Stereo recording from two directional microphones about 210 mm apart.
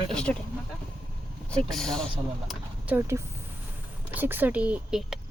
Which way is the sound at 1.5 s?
5° left (ahead or behind).